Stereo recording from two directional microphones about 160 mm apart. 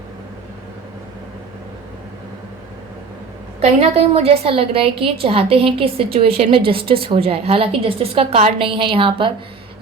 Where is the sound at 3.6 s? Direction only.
40° right (ahead or behind).